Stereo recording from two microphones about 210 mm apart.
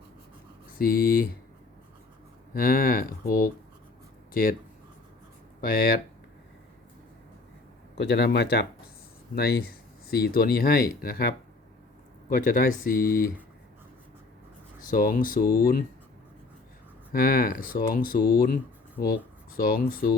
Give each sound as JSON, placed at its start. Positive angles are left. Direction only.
{"t": 0.8, "sound": "speech", "side_deg": 45}
{"t": 2.5, "sound": "speech", "side_deg": 45}
{"t": 5.5, "sound": "speech", "side_deg": 45}
{"t": 7.9, "sound": "speech", "side_deg": 50}
{"t": 14.8, "sound": "speech", "side_deg": 40}
{"t": 17.1, "sound": "speech", "side_deg": 45}